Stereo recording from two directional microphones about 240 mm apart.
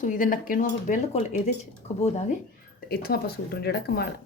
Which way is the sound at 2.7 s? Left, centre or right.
Left.